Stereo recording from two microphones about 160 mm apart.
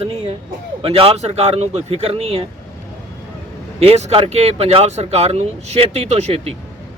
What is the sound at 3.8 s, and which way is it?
Speech, 40° right (ahead or behind).